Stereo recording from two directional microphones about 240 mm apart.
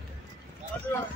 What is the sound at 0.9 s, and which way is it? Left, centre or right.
Speech, centre.